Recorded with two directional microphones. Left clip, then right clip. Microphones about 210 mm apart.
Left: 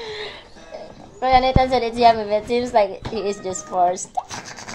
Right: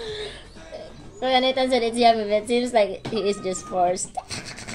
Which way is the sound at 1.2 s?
10° right (ahead or behind).